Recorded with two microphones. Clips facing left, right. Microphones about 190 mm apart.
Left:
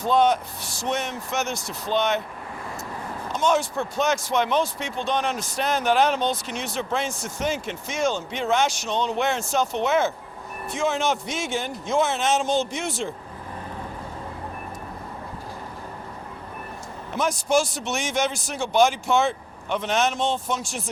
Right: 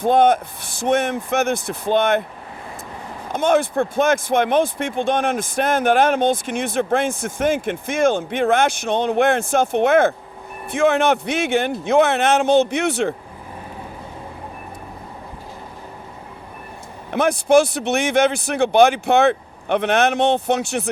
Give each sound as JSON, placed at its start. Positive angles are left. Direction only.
{"t": 0.0, "sound": "speech", "side_deg": -55}
{"t": 3.3, "sound": "speech", "side_deg": -55}
{"t": 17.1, "sound": "speech", "side_deg": -60}